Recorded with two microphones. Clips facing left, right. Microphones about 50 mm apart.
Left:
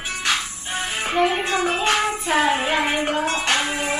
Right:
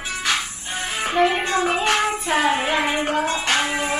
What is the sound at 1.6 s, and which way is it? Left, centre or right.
Music, right.